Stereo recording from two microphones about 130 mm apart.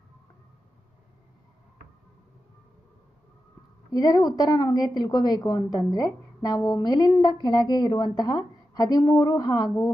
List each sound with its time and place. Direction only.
3.9 s a woman's voice: 30° left (ahead or behind)